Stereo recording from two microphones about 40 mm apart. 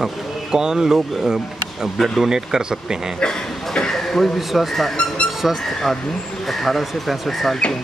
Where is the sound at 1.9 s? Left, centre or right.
Centre.